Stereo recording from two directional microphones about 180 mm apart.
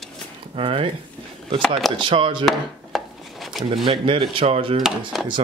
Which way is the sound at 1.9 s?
30° right (ahead or behind).